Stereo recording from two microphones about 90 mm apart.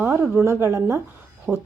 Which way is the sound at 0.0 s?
30° right (ahead or behind).